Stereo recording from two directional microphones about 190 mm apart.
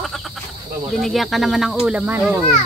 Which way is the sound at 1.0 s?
Centre (ahead or behind).